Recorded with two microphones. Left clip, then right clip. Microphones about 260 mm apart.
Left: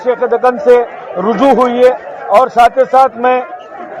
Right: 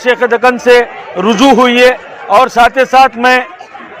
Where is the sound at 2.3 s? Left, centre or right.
Right.